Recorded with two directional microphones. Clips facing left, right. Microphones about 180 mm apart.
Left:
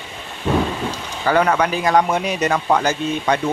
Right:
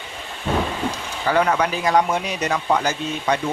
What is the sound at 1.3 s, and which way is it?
Speech, 60° left (ahead or behind).